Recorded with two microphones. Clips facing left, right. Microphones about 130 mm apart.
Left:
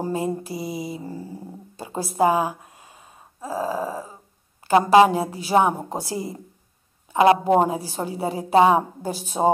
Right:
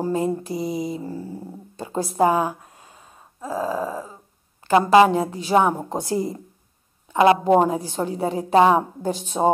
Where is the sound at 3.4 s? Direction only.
35° left (ahead or behind).